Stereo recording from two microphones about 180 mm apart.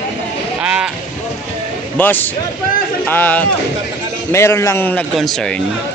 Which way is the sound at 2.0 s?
10° left (ahead or behind).